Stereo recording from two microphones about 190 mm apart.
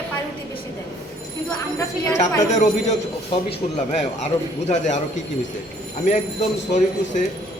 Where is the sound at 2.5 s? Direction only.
35° left (ahead or behind).